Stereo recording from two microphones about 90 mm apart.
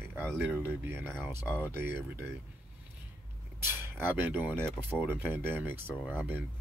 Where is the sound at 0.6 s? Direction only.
25° right (ahead or behind).